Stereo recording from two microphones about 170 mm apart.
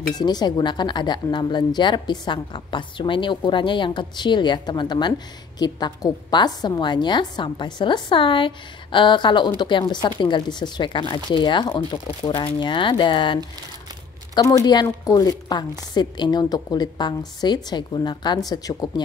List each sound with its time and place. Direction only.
0.1 s speech: 25° left (ahead or behind)